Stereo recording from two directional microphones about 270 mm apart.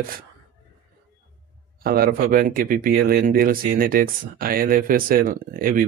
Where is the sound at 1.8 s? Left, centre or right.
Right.